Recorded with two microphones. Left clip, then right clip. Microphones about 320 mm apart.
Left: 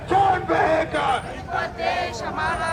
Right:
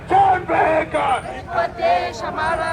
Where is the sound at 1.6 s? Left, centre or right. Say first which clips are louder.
Right 7 dB; centre.